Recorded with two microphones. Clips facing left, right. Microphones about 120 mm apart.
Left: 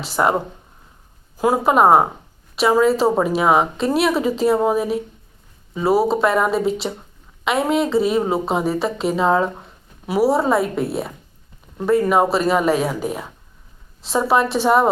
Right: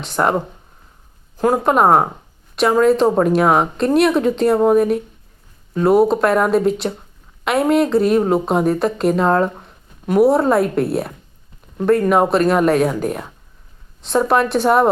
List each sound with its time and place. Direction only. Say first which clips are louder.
0.0 s a woman's voice: right 1 dB; 5° left (ahead or behind)